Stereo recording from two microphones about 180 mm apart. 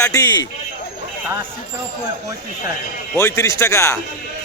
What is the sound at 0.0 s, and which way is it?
Speech, 20° left (ahead or behind).